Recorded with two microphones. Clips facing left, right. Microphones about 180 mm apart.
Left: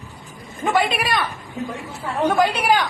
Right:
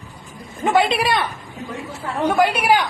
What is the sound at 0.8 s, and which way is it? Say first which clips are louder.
Speech: right 3 dB; 25° right (ahead or behind).